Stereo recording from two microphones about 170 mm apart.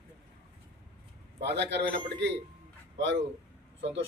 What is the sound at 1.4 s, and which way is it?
Speech, 90° right.